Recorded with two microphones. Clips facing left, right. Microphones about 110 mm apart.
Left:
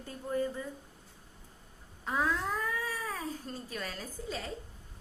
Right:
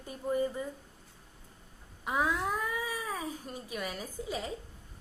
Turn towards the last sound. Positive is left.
turn(degrees=-15)  # may be behind; listen again after turning